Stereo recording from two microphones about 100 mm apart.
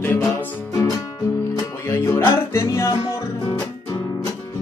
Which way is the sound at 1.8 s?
30° left (ahead or behind).